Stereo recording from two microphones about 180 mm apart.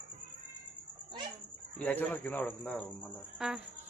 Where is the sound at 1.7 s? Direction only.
10° left (ahead or behind).